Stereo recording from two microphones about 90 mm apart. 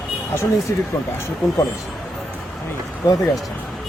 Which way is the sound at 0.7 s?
35° left (ahead or behind).